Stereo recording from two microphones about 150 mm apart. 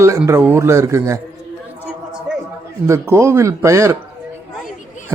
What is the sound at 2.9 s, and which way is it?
A man's voice, 20° right (ahead or behind).